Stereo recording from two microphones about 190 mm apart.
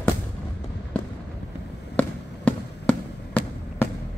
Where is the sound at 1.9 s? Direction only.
5° left (ahead or behind).